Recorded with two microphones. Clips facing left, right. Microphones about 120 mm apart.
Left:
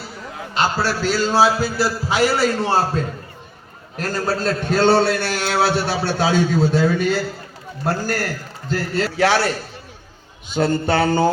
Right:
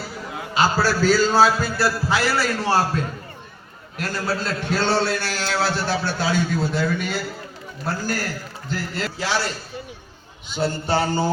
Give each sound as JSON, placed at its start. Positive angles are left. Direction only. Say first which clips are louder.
{"t": 0.9, "sound": "a man's voice", "louder": "right 2 dB", "side_deg": 0}
{"t": 3.9, "sound": "a man's voice", "louder": "left 3 dB", "side_deg": 45}
{"t": 7.9, "sound": "a man's voice", "louder": "left 4 dB", "side_deg": 60}
{"t": 8.7, "sound": "a man's voice", "louder": "left 6 dB", "side_deg": 80}